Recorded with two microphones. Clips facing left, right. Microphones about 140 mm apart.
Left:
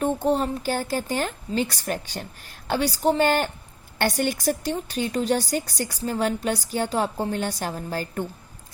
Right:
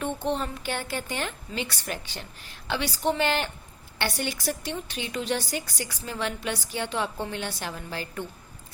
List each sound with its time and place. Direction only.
0.0 s a woman's voice: 40° left (ahead or behind)